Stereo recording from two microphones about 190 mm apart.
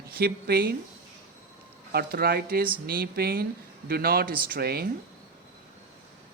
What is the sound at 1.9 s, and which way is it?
Speech, 55° right (ahead or behind).